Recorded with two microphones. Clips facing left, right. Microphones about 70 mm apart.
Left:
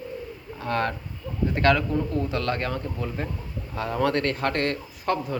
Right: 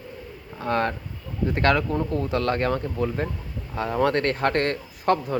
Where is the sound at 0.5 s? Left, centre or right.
Right.